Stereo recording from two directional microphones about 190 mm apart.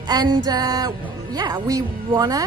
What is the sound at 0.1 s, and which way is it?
Speech, 20° right (ahead or behind).